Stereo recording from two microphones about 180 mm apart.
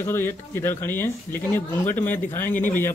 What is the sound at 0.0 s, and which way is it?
Speech, 15° left (ahead or behind).